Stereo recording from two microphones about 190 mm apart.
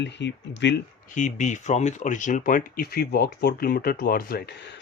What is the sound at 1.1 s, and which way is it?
Speech, 40° left (ahead or behind).